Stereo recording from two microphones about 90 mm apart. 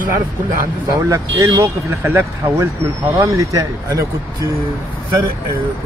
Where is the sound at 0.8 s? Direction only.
35° right (ahead or behind).